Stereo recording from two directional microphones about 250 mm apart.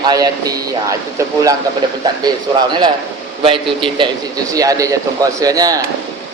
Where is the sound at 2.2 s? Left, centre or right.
Centre.